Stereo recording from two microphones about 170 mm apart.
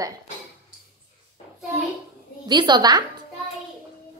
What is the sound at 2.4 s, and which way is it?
Speech, 25° right (ahead or behind).